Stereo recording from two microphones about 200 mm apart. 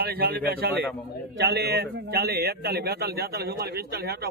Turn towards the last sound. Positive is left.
turn(degrees=-50)  # may be behind; listen again after turning